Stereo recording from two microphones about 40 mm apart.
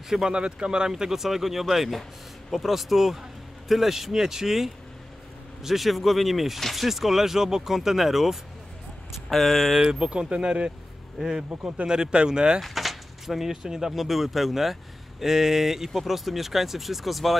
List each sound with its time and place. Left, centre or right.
0.3 s speech: right; by 9.8 s centre
9.8 s speech: right
11.8 s speech: right
12.6 s speech: centre